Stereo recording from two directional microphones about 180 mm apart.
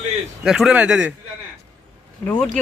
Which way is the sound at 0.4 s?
Centre (ahead or behind).